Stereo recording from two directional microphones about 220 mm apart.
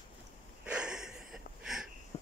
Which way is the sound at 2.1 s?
25° left (ahead or behind).